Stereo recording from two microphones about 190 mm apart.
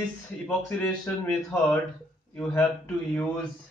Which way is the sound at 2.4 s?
5° left (ahead or behind).